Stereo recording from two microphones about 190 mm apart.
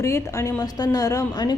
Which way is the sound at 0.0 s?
15° left (ahead or behind).